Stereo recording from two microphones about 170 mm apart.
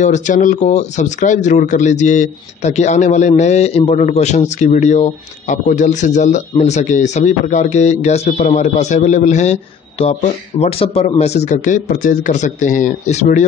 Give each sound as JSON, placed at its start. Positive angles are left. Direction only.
{"t": 0.0, "sound": "a man's voice", "side_deg": 45}